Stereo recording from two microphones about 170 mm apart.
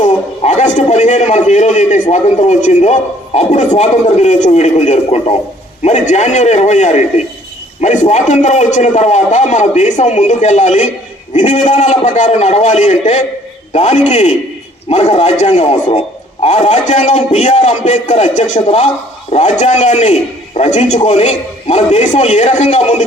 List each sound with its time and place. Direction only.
0.0 s a man's voice: 40° left (ahead or behind)